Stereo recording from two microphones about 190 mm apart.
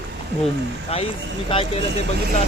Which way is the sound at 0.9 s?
30° left (ahead or behind).